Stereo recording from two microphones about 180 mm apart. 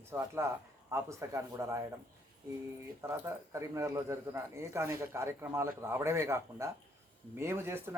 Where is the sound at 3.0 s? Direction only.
15° right (ahead or behind).